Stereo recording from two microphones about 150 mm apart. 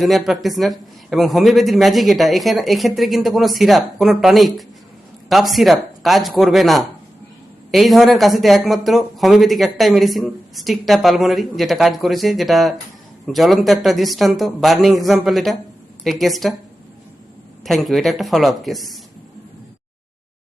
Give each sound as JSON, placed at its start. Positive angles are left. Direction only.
{"t": 0.0, "sound": "speech", "side_deg": 0}
{"t": 17.7, "sound": "speech", "side_deg": 0}